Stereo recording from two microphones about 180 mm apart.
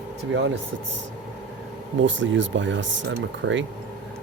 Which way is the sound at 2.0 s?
90° right.